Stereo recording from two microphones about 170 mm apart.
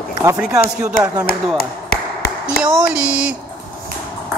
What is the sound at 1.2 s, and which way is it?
Speech, 65° left (ahead or behind).